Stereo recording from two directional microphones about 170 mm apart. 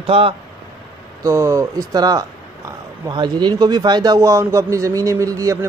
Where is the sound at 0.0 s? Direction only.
35° right (ahead or behind).